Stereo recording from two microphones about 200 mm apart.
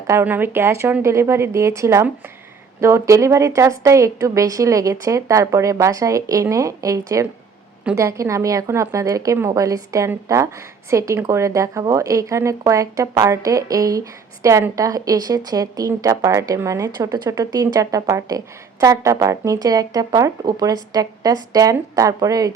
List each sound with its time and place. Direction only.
0.1 s a woman's voice: 10° right (ahead or behind)